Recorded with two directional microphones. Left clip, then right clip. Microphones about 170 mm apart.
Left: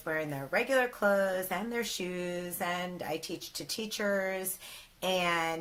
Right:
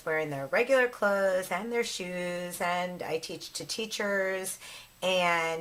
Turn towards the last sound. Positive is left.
turn(degrees=-20)  # may be behind; listen again after turning